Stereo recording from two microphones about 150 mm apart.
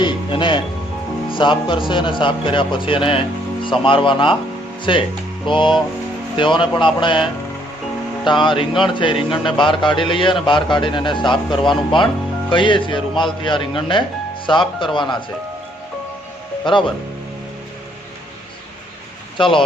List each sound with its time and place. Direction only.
0.0 s speech: 35° left (ahead or behind)
19.4 s speech: 35° left (ahead or behind)